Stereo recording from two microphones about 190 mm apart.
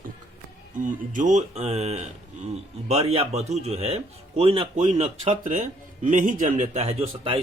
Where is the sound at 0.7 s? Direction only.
45° right (ahead or behind).